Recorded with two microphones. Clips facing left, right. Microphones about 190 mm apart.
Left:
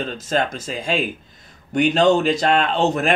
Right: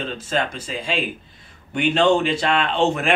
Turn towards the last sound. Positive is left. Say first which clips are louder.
# left 1 dB
turn(degrees=40)  # may be behind; listen again after turning